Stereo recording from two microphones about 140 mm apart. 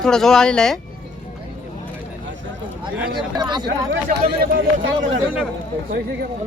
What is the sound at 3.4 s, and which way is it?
Speech, 30° right (ahead or behind).